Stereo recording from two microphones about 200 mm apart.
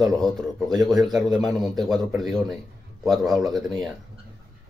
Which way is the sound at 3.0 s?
Centre (ahead or behind).